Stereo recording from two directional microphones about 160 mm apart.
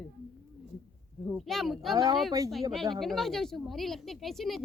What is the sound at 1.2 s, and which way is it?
Speech, centre (ahead or behind).